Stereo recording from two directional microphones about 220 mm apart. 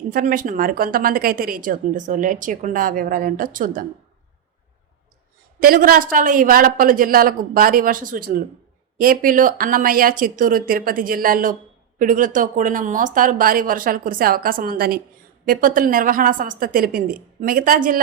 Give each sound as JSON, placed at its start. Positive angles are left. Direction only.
{"t": 0.1, "sound": "speech", "side_deg": -40}
{"t": 5.5, "sound": "speech", "side_deg": -40}